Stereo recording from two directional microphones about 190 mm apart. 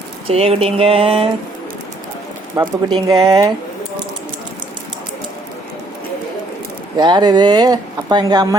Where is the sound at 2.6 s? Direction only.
20° right (ahead or behind).